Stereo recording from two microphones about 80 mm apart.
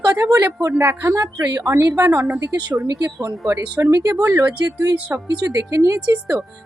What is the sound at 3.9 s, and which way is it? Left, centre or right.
Speech, right.